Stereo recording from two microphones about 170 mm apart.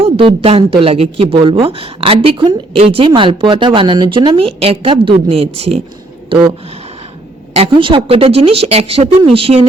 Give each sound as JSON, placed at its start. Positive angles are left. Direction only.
{"t": 0.0, "sound": "a woman's voice", "side_deg": -30}
{"t": 7.5, "sound": "a woman's voice", "side_deg": -35}